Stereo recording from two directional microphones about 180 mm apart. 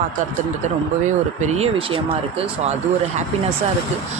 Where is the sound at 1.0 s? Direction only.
40° right (ahead or behind).